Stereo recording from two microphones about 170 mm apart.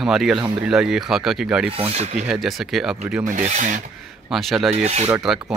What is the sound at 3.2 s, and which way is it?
Speech, 45° right (ahead or behind).